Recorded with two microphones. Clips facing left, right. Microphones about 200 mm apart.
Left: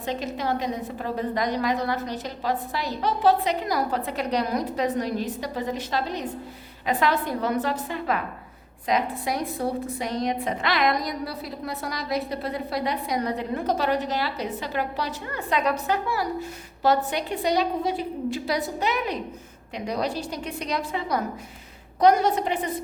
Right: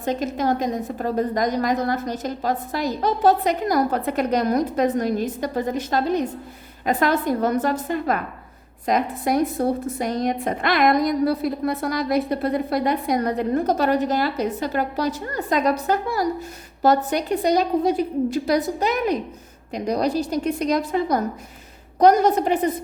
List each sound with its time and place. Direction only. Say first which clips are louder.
0.0 s a woman's voice: right 5 dB; 45° right (ahead or behind)